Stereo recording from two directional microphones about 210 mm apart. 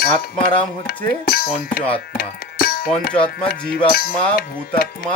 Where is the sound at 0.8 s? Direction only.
45° left (ahead or behind).